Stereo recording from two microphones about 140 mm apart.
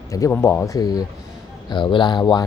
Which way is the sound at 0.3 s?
15° left (ahead or behind).